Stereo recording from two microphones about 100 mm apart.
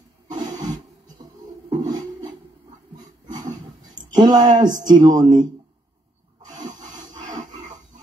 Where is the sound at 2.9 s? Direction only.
40° right (ahead or behind).